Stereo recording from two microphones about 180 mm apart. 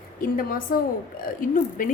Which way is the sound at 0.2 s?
50° left (ahead or behind).